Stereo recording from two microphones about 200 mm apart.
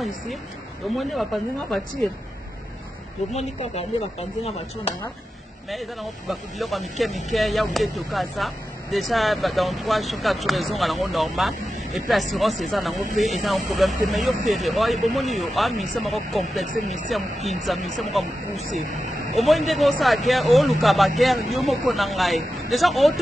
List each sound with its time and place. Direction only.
0.8 s speech: centre (ahead or behind)
3.3 s speech: 30° left (ahead or behind)
5.7 s speech: centre (ahead or behind)